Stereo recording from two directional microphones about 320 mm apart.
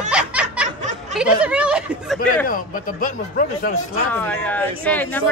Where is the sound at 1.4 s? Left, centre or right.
Centre.